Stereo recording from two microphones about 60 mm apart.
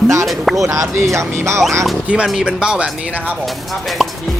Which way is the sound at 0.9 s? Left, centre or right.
Right.